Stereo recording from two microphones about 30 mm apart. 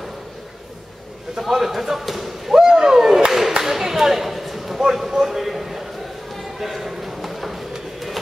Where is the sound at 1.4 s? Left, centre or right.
Centre.